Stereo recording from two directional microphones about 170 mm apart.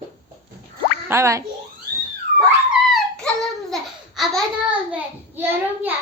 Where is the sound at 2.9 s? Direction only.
Centre (ahead or behind).